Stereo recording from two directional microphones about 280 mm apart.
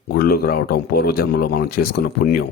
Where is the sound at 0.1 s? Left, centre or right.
Left.